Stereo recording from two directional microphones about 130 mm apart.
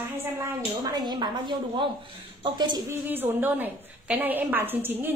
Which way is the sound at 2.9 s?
15° right (ahead or behind).